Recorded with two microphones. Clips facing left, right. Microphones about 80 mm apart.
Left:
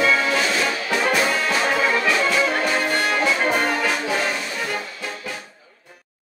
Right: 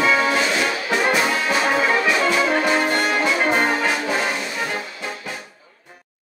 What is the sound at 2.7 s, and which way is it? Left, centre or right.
Music, centre.